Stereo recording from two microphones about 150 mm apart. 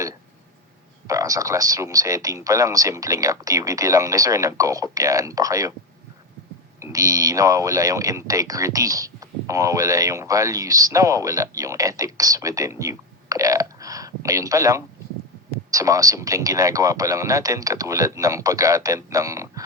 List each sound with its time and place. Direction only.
1.0 s speech: 20° right (ahead or behind)
6.7 s speech: 20° right (ahead or behind)